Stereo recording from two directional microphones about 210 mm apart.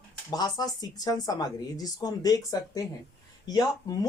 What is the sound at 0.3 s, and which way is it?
Speech, 20° left (ahead or behind).